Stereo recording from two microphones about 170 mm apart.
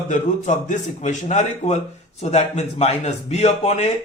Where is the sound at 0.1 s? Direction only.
45° left (ahead or behind).